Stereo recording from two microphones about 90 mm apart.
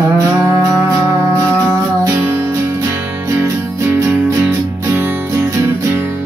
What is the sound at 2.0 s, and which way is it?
Music, 30° right (ahead or behind).